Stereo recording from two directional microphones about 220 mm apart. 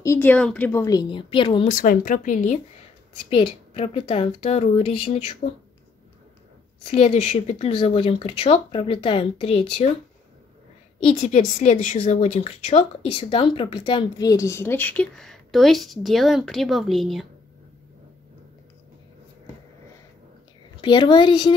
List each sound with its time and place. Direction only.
0.0 s a woman's voice: 10° left (ahead or behind)
1.7 s speech: 40° left (ahead or behind)
6.9 s speech: 30° left (ahead or behind)
11.1 s a woman's voice: 30° left (ahead or behind); by 17.3 s centre (ahead or behind)
20.8 s speech: 20° left (ahead or behind)